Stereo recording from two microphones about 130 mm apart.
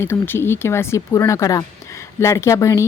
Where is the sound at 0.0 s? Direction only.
20° left (ahead or behind).